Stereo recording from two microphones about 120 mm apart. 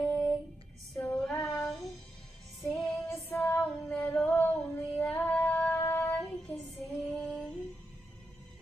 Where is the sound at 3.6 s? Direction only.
5° left (ahead or behind).